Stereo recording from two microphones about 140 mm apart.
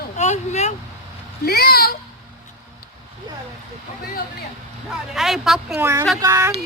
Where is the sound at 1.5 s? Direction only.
90° left.